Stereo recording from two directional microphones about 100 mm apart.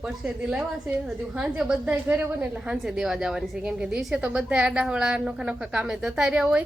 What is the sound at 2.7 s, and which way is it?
A woman's voice, 5° right (ahead or behind).